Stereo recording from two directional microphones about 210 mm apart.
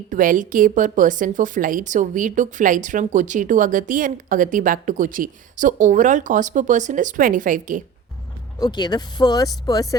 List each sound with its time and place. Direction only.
0.1 s a woman's voice: 40° right (ahead or behind)
8.5 s speech: 20° left (ahead or behind)